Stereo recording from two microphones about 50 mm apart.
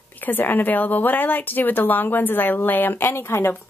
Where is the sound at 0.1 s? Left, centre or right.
Left.